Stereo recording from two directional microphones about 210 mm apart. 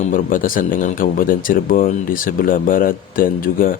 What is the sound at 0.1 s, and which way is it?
Speech, 40° left (ahead or behind).